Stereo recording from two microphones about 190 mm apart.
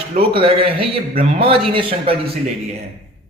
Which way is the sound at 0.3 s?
30° right (ahead or behind).